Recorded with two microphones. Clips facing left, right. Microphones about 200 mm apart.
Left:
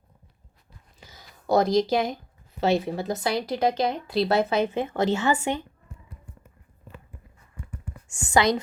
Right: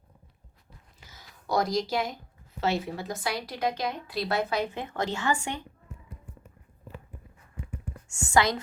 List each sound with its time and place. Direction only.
1.0 s a sound: 25° left (ahead or behind)
2.6 s a woman's voice: 20° left (ahead or behind)
8.1 s a woman's voice: 15° left (ahead or behind)